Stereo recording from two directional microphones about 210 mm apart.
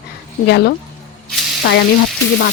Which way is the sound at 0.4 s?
50° left (ahead or behind).